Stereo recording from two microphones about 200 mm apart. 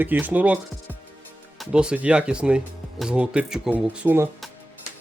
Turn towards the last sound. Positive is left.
turn(degrees=-5)  # may be behind; listen again after turning